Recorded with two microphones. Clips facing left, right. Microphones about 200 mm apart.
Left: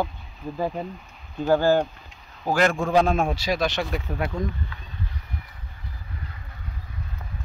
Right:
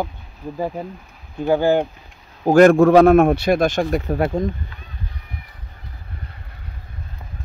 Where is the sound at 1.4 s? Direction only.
15° right (ahead or behind).